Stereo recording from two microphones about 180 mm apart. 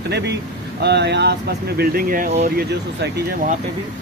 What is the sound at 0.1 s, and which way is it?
Speech, 65° right (ahead or behind).